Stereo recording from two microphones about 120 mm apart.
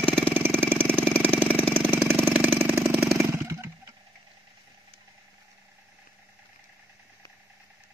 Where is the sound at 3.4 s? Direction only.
20° right (ahead or behind).